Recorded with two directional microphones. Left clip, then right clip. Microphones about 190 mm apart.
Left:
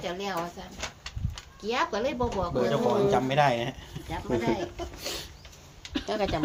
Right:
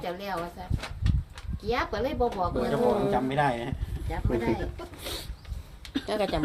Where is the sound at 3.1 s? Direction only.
45° left (ahead or behind).